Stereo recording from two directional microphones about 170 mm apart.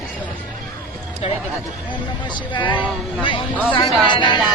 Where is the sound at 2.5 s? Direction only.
25° left (ahead or behind).